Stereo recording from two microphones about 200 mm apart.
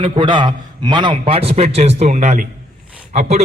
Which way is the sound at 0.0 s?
25° right (ahead or behind).